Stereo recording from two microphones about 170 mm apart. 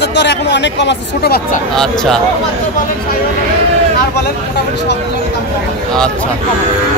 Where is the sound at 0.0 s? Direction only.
85° left.